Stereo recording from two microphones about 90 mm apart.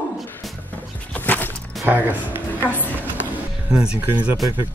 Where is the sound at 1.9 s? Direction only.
20° right (ahead or behind).